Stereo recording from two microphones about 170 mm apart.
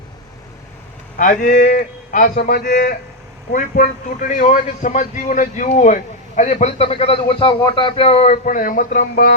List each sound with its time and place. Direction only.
1.2 s speech: 50° left (ahead or behind)